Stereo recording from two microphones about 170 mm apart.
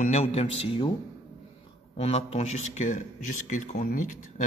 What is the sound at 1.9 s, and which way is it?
A man's voice, 35° left (ahead or behind).